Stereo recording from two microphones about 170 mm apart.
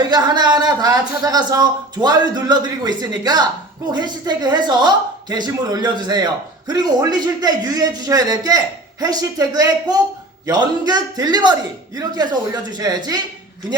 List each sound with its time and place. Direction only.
0.1 s a man's voice: 25° right (ahead or behind)